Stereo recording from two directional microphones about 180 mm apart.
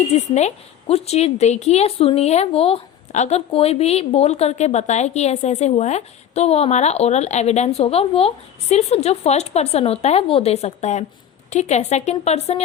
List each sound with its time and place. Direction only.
0.1 s a woman's voice: 35° left (ahead or behind)